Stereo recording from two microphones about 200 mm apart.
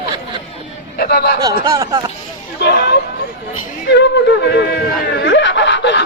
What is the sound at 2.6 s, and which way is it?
Hubbub, 55° left (ahead or behind).